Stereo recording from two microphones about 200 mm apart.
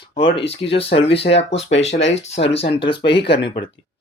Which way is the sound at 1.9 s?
65° left (ahead or behind).